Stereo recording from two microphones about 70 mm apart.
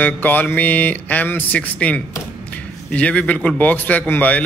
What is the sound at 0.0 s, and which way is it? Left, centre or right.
Speech, left.